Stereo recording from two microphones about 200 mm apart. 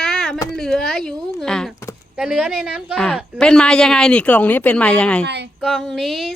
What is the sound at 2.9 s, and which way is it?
A woman's voice, 5° left (ahead or behind).